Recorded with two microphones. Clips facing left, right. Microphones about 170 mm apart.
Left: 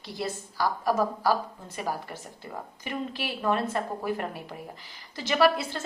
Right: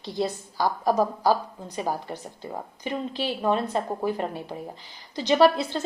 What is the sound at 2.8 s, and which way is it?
A woman's voice, 20° right (ahead or behind).